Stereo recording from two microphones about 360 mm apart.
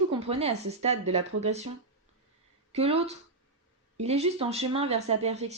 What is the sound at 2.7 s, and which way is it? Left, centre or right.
Speech, centre.